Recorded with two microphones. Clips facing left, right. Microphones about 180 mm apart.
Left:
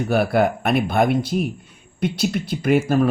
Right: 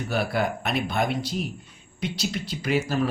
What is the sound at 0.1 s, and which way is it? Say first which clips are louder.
Speech: left 7 dB; 55° left (ahead or behind).